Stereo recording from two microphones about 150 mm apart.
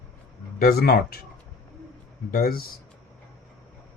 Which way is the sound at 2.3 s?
80° left.